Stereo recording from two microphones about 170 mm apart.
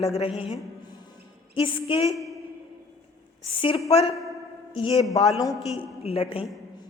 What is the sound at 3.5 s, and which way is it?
A man's voice, 30° left (ahead or behind).